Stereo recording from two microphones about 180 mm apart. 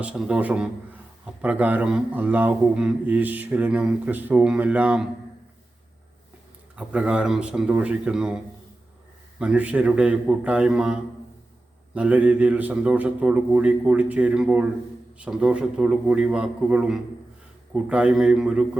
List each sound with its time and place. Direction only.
0.0 s a man's voice: 5° right (ahead or behind)
6.7 s a man's voice: 5° right (ahead or behind)
9.4 s a man's voice: 5° right (ahead or behind)